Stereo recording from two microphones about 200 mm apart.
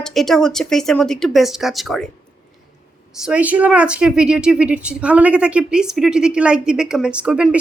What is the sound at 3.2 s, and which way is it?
A woman's voice, 5° right (ahead or behind).